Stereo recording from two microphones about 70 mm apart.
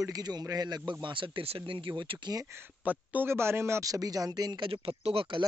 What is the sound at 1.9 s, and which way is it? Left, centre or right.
Speech, right.